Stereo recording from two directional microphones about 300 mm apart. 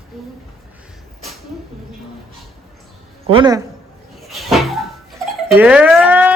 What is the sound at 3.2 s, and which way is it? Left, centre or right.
Speech, centre.